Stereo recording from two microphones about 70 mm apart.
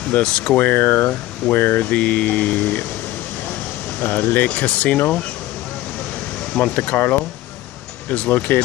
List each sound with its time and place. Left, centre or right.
0.1 s speech: left
4.0 s speech: left
6.5 s speech: left